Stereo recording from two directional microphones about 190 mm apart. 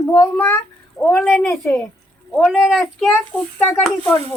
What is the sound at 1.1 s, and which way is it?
Speech, 5° left (ahead or behind).